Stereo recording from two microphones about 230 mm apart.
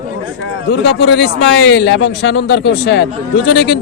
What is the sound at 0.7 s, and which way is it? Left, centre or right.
A man's voice, left.